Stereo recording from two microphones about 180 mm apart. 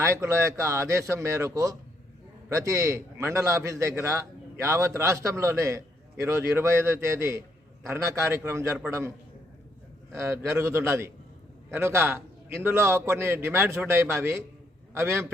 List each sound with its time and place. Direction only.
0.0 s a man's voice: 15° right (ahead or behind)